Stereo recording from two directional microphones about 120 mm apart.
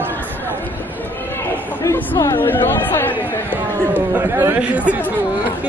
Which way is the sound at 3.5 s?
15° right (ahead or behind).